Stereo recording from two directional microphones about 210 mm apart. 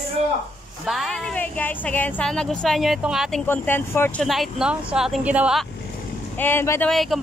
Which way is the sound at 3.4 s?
10° left (ahead or behind).